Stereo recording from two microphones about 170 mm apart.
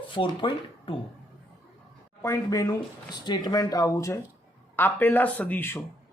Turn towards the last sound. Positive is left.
turn(degrees=10)  # may be behind; listen again after turning